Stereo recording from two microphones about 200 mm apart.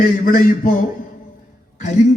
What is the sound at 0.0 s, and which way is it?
A man's voice, 45° left (ahead or behind).